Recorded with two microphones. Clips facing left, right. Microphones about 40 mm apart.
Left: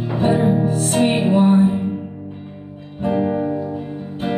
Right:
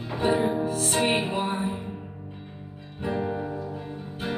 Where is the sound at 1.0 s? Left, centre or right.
Centre.